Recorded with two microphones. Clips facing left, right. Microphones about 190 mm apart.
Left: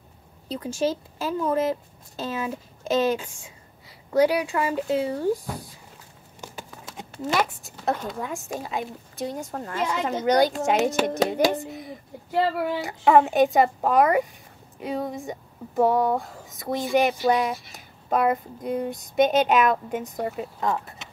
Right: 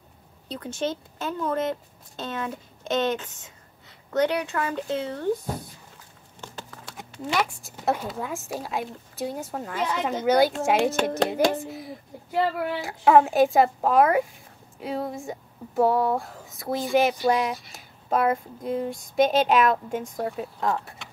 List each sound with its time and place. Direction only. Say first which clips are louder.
0.5 s speech: left 4 dB; 10° left (ahead or behind)
6.4 s clip-clop: left 1 dB; 10° left (ahead or behind)
7.1 s a sound: left 3 dB; 45° left (ahead or behind)
7.8 s speech: even; 5° right (ahead or behind)